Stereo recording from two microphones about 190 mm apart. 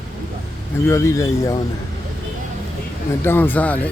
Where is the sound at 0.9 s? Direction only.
15° left (ahead or behind).